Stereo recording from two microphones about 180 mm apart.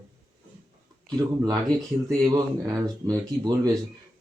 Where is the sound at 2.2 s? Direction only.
20° right (ahead or behind).